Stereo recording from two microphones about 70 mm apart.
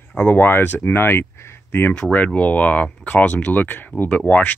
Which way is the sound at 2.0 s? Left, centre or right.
Centre.